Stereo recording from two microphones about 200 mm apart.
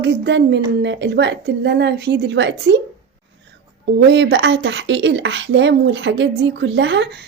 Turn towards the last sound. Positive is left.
turn(degrees=-60)  # may be behind; listen again after turning